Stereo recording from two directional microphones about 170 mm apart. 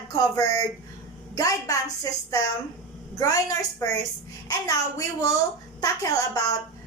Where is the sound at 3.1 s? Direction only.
20° left (ahead or behind).